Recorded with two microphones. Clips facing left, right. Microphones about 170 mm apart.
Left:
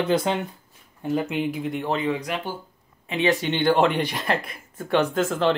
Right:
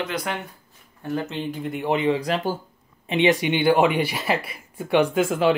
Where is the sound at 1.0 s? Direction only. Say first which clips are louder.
Left 3 dB; 15° left (ahead or behind).